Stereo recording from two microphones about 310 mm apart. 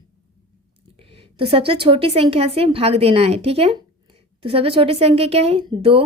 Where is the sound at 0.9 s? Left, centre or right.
Centre.